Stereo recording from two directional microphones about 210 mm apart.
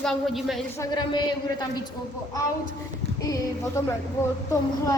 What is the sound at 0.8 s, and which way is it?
Speech, 20° left (ahead or behind).